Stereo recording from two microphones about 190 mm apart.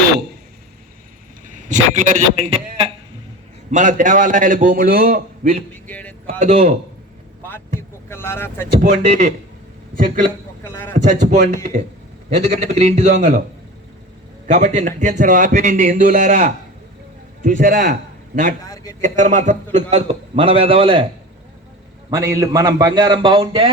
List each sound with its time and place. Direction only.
1.5 s a man's voice: 40° right (ahead or behind)
3.7 s a man's voice: 45° right (ahead or behind)
5.7 s speech: 10° left (ahead or behind)
6.4 s a man's voice: 40° right (ahead or behind)
8.1 s speech: 10° left (ahead or behind)
8.9 s a man's voice: 35° right (ahead or behind)
10.6 s a man's voice: 10° left (ahead or behind)
11.3 s a man's voice: 40° right (ahead or behind)
14.4 s a man's voice: 40° right (ahead or behind)
18.6 s a man's voice: 20° left (ahead or behind)
19.0 s a man's voice: 40° right (ahead or behind)
22.1 s a man's voice: 15° right (ahead or behind)